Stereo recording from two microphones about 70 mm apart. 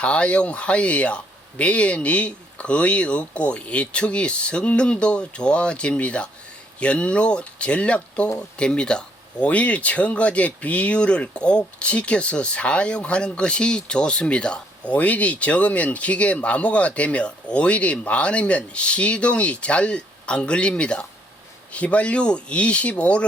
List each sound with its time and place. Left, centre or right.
0.0 s speech: centre